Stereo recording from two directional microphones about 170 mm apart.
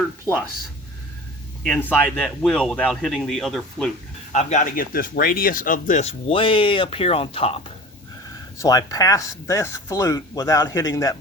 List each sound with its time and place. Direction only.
1.6 s speech: 10° left (ahead or behind)
4.3 s speech: 45° left (ahead or behind)
8.5 s speech: 20° left (ahead or behind)